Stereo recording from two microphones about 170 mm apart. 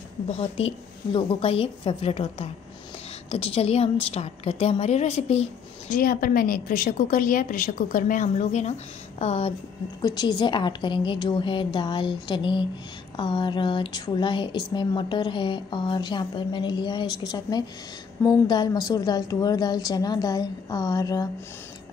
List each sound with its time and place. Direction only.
0.3 s a woman's voice: 35° left (ahead or behind)
5.9 s a woman's voice: 55° left (ahead or behind); by 9.5 s 40° left (ahead or behind)
10.0 s a woman's voice: 25° left (ahead or behind)